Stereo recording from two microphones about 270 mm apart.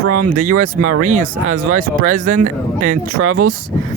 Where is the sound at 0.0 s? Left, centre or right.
Right.